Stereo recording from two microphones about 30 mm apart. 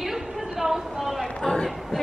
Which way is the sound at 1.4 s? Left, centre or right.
Left.